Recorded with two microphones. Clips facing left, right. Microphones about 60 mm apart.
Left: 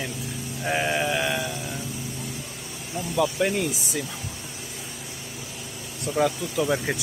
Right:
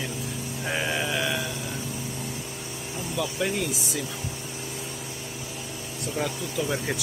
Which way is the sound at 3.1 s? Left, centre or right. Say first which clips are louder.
Left 5 dB; left.